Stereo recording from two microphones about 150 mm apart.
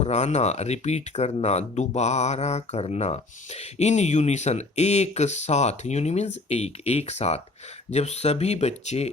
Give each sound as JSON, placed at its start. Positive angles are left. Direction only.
{"t": 0.0, "sound": "speech", "side_deg": 50}